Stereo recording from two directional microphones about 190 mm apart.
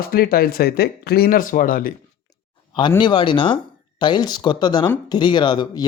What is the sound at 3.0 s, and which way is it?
Speech, 25° left (ahead or behind).